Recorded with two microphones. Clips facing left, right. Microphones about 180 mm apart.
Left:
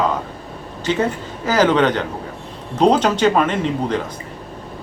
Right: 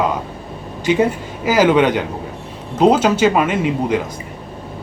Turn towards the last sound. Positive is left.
turn(degrees=-10)  # may be behind; listen again after turning